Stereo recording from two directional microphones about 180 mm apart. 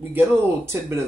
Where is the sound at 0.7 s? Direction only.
15° right (ahead or behind).